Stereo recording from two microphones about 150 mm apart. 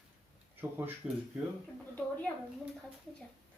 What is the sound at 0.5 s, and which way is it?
Speech, 15° right (ahead or behind).